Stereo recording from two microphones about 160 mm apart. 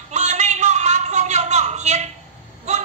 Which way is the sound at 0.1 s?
45° right (ahead or behind).